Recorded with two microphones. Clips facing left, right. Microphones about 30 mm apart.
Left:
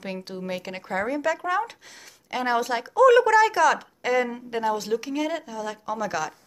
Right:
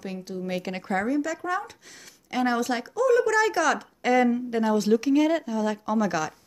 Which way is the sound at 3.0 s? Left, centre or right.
Left.